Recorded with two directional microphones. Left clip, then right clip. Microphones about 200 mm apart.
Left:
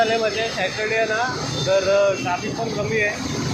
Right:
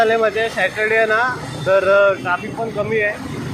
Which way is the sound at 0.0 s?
60° right (ahead or behind).